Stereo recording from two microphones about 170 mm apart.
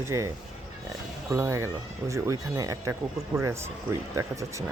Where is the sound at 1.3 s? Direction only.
15° right (ahead or behind).